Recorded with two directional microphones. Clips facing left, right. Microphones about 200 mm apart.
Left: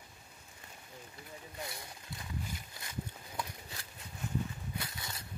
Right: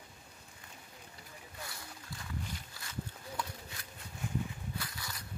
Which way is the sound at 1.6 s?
20° left (ahead or behind).